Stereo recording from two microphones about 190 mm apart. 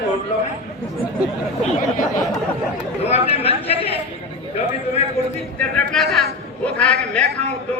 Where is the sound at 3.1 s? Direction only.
30° left (ahead or behind).